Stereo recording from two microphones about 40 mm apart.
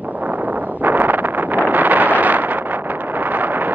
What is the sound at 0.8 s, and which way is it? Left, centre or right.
Wind noise, right.